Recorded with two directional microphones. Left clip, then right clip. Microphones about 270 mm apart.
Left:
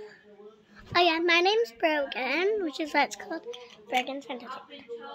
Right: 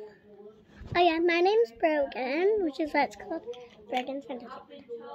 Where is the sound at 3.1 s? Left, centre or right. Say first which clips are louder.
Even; left.